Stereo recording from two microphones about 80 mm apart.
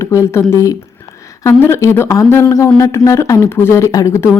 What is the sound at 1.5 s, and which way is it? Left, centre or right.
Speech, left.